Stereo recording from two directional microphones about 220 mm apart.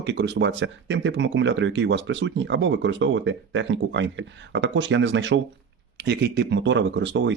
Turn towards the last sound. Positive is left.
turn(degrees=-55)  # may be behind; listen again after turning